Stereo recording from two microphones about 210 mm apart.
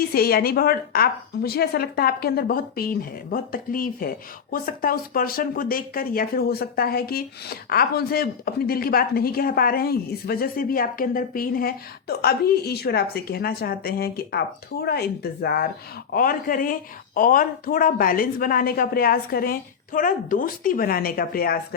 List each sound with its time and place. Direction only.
0.1 s speech: 45° left (ahead or behind)